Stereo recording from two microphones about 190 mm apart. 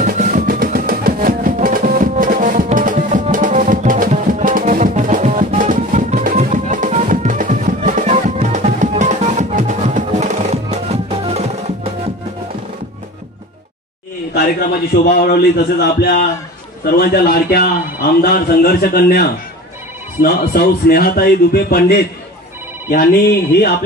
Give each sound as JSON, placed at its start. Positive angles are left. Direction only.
{"t": 0.0, "sound": "music", "side_deg": -45}
{"t": 15.0, "sound": "a man's voice", "side_deg": 55}